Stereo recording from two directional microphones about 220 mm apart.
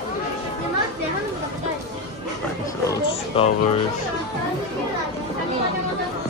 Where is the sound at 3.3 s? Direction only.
25° left (ahead or behind).